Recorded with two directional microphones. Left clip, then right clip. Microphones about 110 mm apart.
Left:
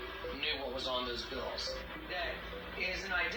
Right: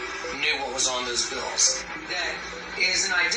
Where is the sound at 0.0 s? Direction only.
40° right (ahead or behind).